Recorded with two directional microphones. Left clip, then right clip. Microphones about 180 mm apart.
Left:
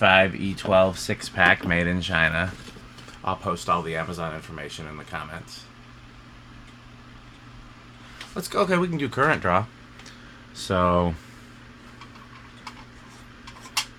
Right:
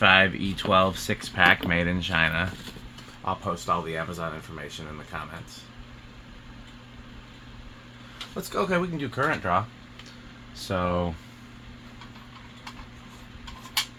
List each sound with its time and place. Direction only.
0.0 s speech: 15° left (ahead or behind)
8.4 s speech: 45° left (ahead or behind)
9.0 s speech: 70° left (ahead or behind)
10.7 s speech: 65° left (ahead or behind)